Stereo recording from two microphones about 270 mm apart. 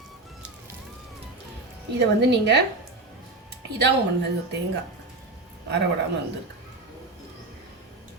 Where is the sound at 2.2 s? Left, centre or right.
Right.